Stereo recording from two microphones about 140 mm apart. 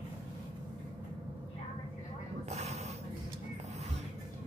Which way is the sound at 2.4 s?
50° right (ahead or behind).